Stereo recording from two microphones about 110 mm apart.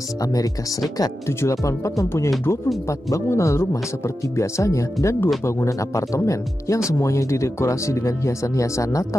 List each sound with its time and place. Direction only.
0.2 s speech: 35° left (ahead or behind)